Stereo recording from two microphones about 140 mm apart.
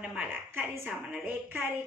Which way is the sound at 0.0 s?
10° right (ahead or behind).